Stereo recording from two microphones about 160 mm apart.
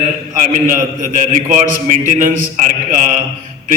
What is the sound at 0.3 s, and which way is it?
A man's voice, 55° right (ahead or behind).